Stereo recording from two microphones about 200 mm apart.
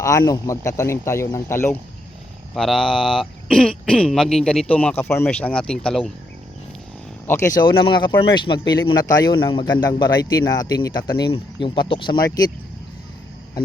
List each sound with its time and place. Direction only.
0.0 s a man's voice: 15° left (ahead or behind)
2.6 s speech: centre (ahead or behind)
7.3 s a man's voice: 15° left (ahead or behind)